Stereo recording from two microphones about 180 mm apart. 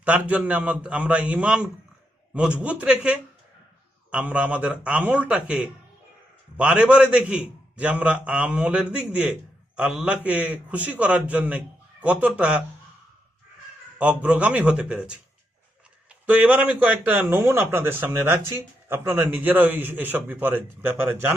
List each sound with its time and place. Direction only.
0.3 s a man's voice: 10° right (ahead or behind)
14.0 s a man's voice: 5° right (ahead or behind)